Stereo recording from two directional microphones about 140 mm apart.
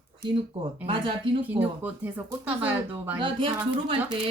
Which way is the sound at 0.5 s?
40° right (ahead or behind).